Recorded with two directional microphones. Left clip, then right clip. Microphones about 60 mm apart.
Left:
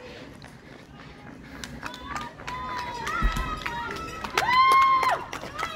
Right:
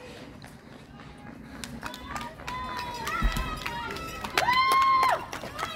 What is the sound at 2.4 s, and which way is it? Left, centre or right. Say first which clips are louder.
Run: left 1 dB; right.